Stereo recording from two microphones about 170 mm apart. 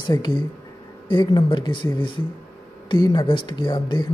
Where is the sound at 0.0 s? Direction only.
25° left (ahead or behind).